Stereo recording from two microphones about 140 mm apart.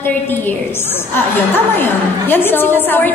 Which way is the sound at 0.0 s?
15° left (ahead or behind).